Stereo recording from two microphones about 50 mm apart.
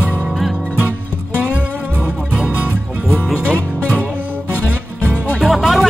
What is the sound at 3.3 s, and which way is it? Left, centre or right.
Music, left.